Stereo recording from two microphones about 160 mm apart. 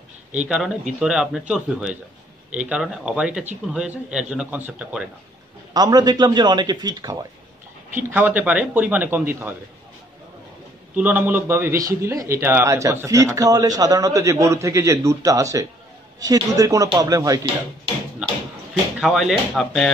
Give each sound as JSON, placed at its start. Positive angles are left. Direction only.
{"t": 0.3, "sound": "a man's voice", "side_deg": -5}
{"t": 5.7, "sound": "speech", "side_deg": -25}
{"t": 8.0, "sound": "a man's voice", "side_deg": -10}
{"t": 11.0, "sound": "a man's voice", "side_deg": -10}
{"t": 18.9, "sound": "a man's voice", "side_deg": -5}